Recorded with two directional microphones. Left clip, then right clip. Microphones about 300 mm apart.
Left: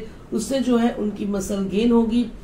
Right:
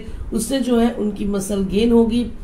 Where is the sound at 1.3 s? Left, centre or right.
Right.